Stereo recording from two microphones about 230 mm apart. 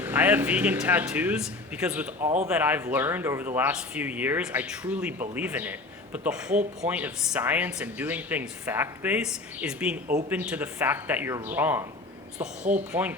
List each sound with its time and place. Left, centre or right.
0.0 s speech: centre
12.4 s speech: right
12.9 s speech: centre